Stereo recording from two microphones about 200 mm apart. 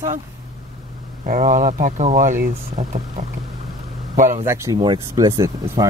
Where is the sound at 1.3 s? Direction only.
40° right (ahead or behind).